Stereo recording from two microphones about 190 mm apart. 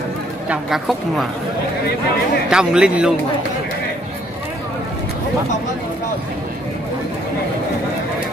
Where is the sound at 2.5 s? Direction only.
5° right (ahead or behind).